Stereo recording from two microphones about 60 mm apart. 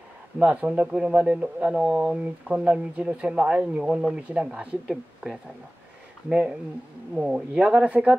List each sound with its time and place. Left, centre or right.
0.4 s speech: right
4.8 s a woman's voice: centre
6.2 s speech: centre